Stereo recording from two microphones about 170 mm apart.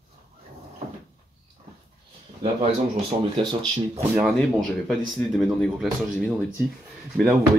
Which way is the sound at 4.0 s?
10° right (ahead or behind).